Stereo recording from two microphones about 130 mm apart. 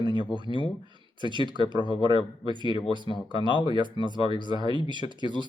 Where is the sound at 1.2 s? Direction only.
35° right (ahead or behind).